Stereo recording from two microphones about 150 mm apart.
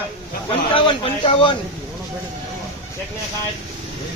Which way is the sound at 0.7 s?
35° left (ahead or behind).